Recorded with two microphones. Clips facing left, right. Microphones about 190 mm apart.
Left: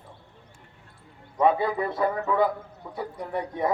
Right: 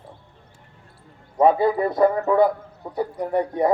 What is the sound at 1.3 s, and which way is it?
A man's voice, 35° right (ahead or behind).